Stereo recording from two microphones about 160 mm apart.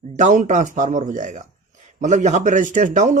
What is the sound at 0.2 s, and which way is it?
Speech, 50° right (ahead or behind).